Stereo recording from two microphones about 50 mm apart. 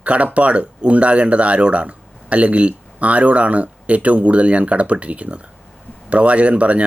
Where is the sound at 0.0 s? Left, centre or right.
Right.